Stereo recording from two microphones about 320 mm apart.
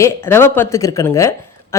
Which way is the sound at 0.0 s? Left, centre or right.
Centre.